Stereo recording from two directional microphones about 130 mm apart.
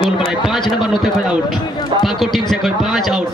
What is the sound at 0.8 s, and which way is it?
A man's voice, centre (ahead or behind).